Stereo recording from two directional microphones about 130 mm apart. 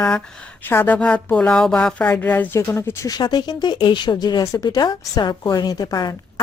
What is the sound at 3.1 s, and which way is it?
A woman's voice, 30° left (ahead or behind).